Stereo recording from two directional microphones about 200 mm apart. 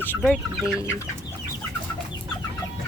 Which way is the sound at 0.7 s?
15° left (ahead or behind).